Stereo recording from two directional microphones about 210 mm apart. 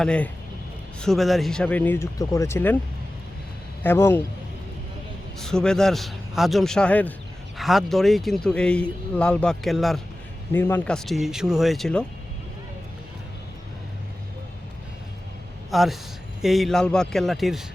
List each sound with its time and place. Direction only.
0.0 s speech: 5° left (ahead or behind)
3.8 s speech: 10° left (ahead or behind)
5.4 s speech: 5° left (ahead or behind)
15.7 s speech: centre (ahead or behind)